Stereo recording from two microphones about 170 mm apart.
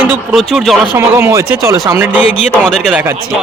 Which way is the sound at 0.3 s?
Centre (ahead or behind).